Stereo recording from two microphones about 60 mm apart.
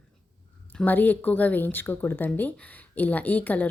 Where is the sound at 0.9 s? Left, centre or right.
Left.